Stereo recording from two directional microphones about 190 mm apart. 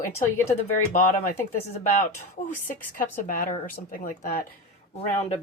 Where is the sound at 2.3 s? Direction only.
45° left (ahead or behind).